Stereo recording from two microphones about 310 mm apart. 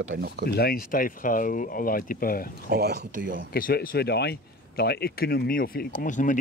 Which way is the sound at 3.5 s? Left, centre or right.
Left.